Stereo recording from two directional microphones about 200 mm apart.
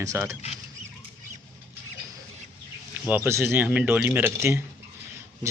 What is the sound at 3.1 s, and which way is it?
Speech, 10° right (ahead or behind).